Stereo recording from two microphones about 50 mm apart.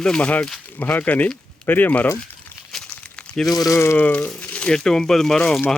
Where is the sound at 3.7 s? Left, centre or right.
Left.